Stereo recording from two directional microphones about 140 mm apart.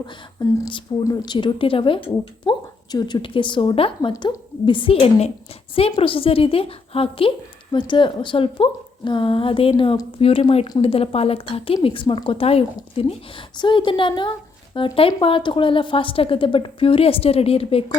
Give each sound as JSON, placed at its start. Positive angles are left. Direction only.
{"t": 1.0, "sound": "a woman's voice", "side_deg": 30}
{"t": 4.1, "sound": "a woman's voice", "side_deg": 25}
{"t": 4.6, "sound": "a woman's voice", "side_deg": 35}